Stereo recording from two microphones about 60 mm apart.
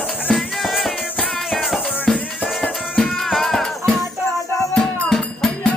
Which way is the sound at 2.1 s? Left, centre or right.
Centre.